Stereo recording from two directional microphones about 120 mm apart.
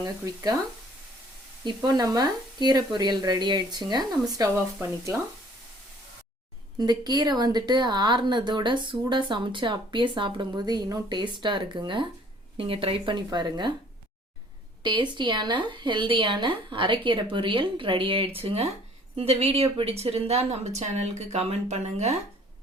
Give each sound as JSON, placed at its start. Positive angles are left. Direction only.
{"t": 0.2, "sound": "speech", "side_deg": -30}
{"t": 1.6, "sound": "speech", "side_deg": -35}
{"t": 4.5, "sound": "speech", "side_deg": -20}
{"t": 6.7, "sound": "speech", "side_deg": -35}
{"t": 14.8, "sound": "a woman's voice", "side_deg": -40}